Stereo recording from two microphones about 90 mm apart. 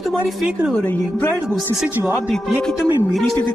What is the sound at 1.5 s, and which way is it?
Speech, centre (ahead or behind).